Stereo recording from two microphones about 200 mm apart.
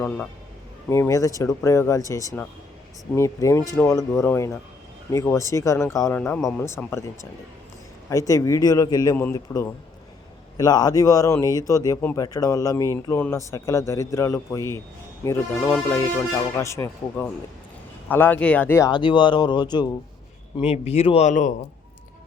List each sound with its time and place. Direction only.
0.0 s speech: 10° left (ahead or behind)
8.1 s speech: 15° left (ahead or behind); by 21.5 s 40° left (ahead or behind)